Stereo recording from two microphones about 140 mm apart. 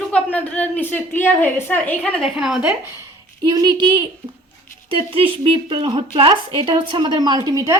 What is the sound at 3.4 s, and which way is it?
Speech, 30° right (ahead or behind).